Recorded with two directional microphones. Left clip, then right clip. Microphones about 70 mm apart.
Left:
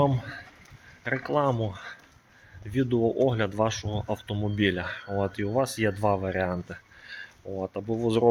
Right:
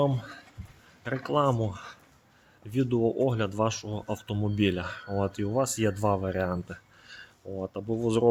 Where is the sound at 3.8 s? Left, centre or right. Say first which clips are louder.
Left 3 dB; right.